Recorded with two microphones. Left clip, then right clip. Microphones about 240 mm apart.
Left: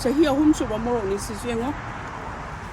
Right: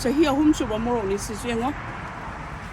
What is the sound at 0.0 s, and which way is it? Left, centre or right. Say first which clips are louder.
Speech: left 1 dB; right.